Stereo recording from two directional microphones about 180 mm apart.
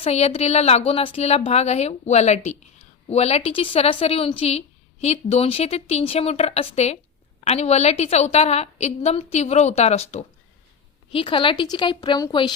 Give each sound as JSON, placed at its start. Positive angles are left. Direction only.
{"t": 0.0, "sound": "a woman's voice", "side_deg": 35}